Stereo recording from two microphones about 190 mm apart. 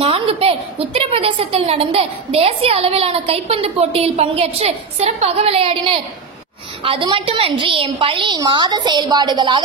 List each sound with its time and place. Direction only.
0.0 s a woman's voice: 30° right (ahead or behind)